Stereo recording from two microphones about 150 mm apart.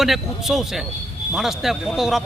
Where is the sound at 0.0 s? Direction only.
Centre (ahead or behind).